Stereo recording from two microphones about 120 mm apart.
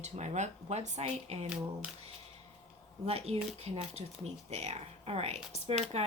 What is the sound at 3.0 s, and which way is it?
Speech, 60° right (ahead or behind).